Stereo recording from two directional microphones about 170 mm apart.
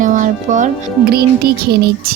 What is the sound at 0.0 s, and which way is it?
Music, 50° right (ahead or behind).